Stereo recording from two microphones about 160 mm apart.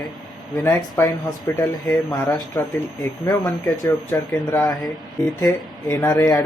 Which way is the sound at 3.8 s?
20° left (ahead or behind).